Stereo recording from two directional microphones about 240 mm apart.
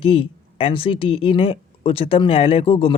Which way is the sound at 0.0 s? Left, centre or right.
Left.